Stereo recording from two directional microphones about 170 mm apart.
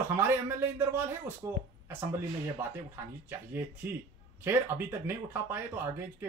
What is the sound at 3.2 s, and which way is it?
Speech, 15° right (ahead or behind).